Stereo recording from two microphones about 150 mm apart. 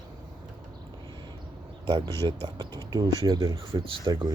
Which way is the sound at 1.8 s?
25° right (ahead or behind).